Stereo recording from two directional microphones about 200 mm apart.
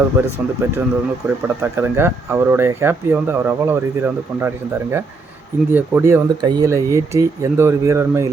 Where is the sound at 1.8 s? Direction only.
10° right (ahead or behind).